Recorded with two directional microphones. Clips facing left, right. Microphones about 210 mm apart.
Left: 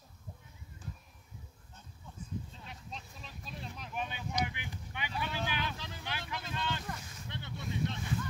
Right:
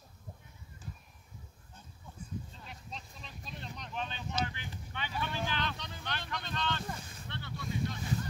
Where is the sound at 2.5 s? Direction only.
Centre (ahead or behind).